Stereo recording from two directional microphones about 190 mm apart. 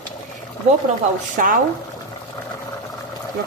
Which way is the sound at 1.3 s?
45° right (ahead or behind).